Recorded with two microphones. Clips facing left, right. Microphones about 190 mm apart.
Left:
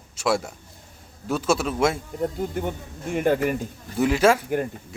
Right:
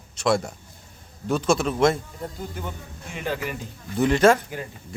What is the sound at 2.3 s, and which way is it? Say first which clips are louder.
Speech: left 7 dB; 55° left (ahead or behind).